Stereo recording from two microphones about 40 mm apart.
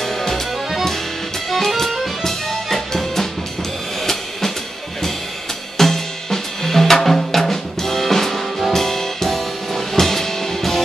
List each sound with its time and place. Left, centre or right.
0.0 s music: centre
1.5 s music: centre
4.0 s drum kit: centre
5.8 s drum kit: centre